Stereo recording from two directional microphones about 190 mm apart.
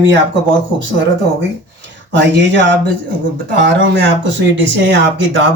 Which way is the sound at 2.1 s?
70° right (ahead or behind).